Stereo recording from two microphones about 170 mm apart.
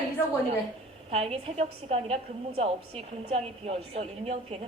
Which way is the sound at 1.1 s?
35° right (ahead or behind).